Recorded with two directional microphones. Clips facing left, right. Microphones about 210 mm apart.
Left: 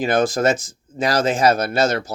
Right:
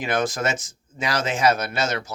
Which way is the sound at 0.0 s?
30° left (ahead or behind).